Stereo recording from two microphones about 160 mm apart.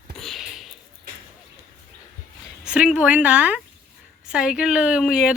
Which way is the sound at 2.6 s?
5° right (ahead or behind).